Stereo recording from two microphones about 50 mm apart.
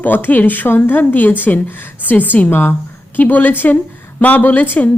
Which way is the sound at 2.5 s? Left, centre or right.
Left.